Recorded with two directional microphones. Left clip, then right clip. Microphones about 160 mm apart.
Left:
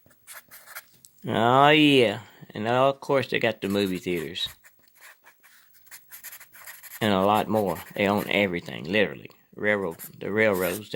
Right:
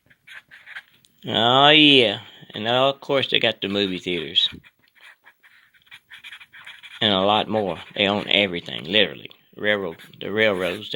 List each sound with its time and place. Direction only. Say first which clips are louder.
1.2 s speech: right 3 dB; 35° left (ahead or behind)
7.0 s speech: right 3 dB; 35° left (ahead or behind)